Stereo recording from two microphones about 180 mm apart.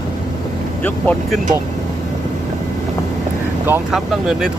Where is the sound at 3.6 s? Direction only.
10° right (ahead or behind).